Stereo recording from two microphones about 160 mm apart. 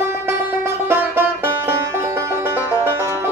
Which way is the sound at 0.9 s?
10° right (ahead or behind).